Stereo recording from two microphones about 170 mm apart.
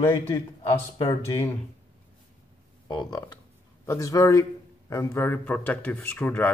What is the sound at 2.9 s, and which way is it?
A man's voice, 25° left (ahead or behind).